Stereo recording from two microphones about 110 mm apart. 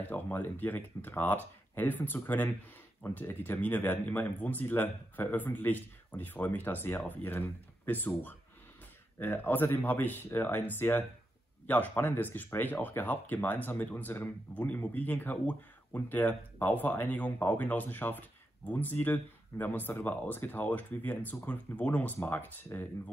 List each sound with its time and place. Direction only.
0.0 s speech: 15° left (ahead or behind)
9.2 s speech: 20° left (ahead or behind)